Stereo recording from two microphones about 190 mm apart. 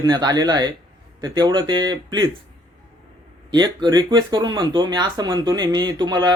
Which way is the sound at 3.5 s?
20° right (ahead or behind).